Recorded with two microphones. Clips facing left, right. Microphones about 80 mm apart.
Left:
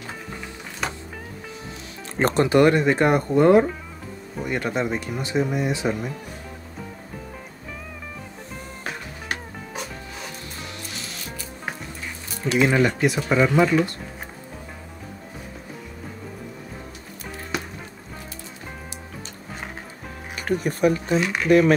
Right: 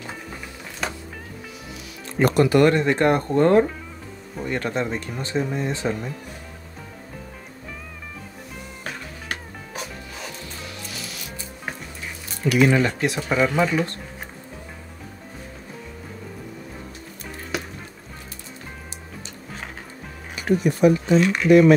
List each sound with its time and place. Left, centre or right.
0.8 s music: centre
2.1 s speech: left; by 6.1 s centre
12.4 s speech: left
12.7 s speech: centre
20.3 s speech: left
21.2 s speech: centre
21.5 s speech: left